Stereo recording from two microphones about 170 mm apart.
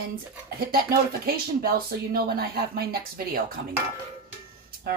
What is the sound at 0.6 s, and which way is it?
Speech, 60° right (ahead or behind).